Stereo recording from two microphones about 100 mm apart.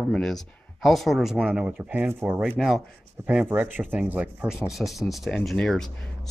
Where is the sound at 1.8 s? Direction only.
20° right (ahead or behind).